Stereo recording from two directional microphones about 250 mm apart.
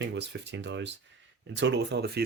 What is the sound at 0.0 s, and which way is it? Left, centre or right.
Speech, right.